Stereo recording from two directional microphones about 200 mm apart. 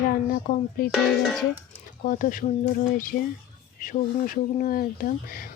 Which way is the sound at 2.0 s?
45° left (ahead or behind).